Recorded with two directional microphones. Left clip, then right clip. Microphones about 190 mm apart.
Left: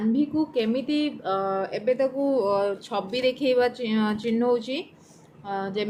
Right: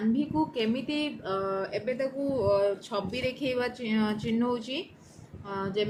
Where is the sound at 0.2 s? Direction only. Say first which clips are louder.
Left 4 dB; 20° left (ahead or behind).